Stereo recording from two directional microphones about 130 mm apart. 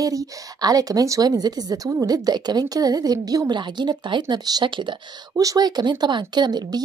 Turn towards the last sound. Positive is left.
turn(degrees=-35)  # may be behind; listen again after turning